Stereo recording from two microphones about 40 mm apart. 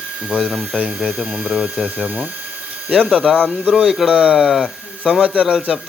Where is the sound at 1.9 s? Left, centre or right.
Right.